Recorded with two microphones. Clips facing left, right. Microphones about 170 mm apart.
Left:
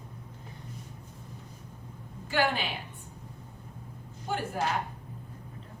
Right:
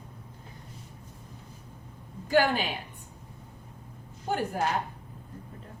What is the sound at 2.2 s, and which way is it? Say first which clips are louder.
Speech: right 4 dB; 40° right (ahead or behind).